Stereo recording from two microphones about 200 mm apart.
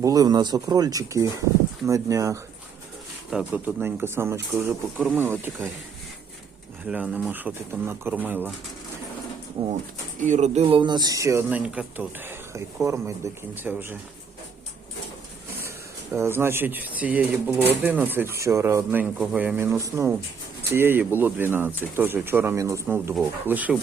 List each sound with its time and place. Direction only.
0.0 s speech: 20° right (ahead or behind)
3.2 s speech: 5° right (ahead or behind)
6.8 s speech: 5° right (ahead or behind)
10.2 s speech: 35° right (ahead or behind); by 13.9 s 10° right (ahead or behind)
16.1 s speech: 10° right (ahead or behind)